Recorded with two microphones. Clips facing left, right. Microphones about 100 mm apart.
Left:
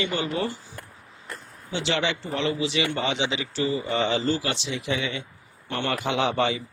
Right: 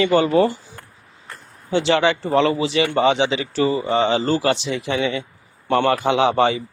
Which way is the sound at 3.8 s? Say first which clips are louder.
Right 6 dB; 35° right (ahead or behind).